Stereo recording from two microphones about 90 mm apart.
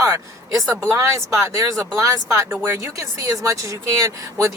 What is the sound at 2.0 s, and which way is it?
Speech, 35° right (ahead or behind).